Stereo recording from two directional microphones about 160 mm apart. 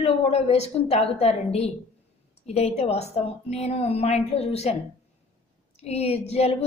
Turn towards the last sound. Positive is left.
turn(degrees=40)  # may be behind; listen again after turning